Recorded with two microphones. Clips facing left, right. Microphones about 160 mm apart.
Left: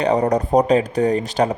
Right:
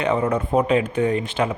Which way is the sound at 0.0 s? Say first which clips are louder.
Left 3 dB; 40° left (ahead or behind).